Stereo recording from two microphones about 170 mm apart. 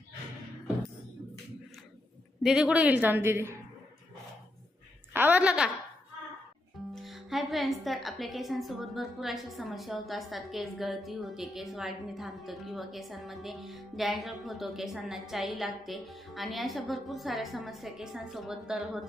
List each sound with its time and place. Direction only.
2.4 s a woman's voice: 5° right (ahead or behind)
5.1 s a sound: 10° right (ahead or behind)
6.9 s a woman's voice: centre (ahead or behind)